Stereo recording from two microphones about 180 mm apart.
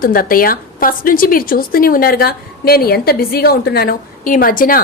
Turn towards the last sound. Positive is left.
turn(degrees=50)  # may be behind; listen again after turning